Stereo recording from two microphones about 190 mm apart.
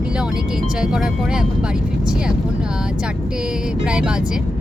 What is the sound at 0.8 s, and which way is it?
Speech, 5° right (ahead or behind).